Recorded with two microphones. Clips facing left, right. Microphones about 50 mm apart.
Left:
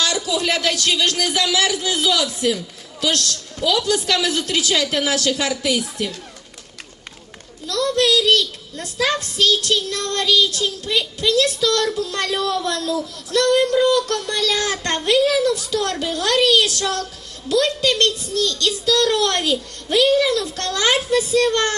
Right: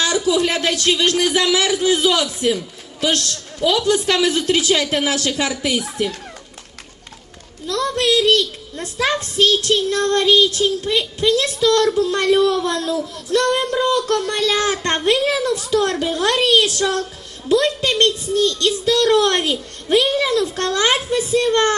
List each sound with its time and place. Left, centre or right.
0.0 s speech: right
7.7 s a child's voice: right